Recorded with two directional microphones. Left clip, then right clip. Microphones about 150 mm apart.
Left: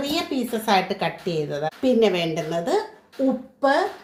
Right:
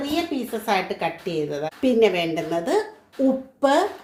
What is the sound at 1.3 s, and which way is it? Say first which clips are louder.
Speech: even; 5° left (ahead or behind).